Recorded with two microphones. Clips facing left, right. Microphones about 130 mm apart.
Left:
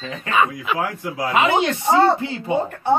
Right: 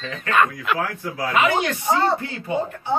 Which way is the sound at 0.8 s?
15° left (ahead or behind).